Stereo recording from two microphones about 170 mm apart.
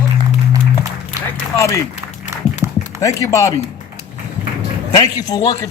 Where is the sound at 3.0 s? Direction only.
20° left (ahead or behind).